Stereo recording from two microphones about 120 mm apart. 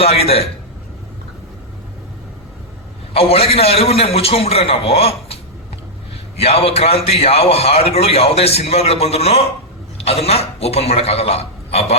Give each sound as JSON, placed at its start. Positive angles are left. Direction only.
{"t": 0.0, "sound": "a man's voice", "side_deg": 55}
{"t": 3.1, "sound": "a man's voice", "side_deg": 55}